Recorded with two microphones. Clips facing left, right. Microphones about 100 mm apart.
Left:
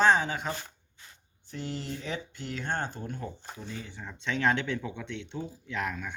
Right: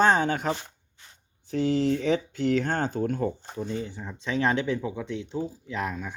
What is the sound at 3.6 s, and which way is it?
Speech, 35° right (ahead or behind).